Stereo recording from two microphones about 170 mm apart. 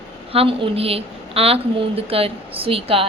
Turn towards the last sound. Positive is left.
turn(degrees=-35)  # may be behind; listen again after turning